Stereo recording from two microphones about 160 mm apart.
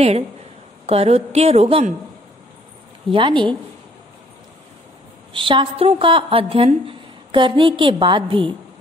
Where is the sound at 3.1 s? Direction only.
30° right (ahead or behind).